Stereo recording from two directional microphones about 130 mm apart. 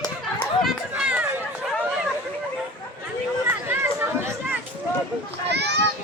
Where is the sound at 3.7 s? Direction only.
15° right (ahead or behind).